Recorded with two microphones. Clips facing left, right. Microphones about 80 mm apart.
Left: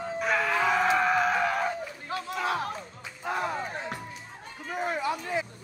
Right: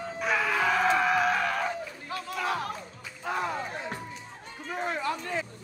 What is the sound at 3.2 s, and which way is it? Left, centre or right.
Music, centre.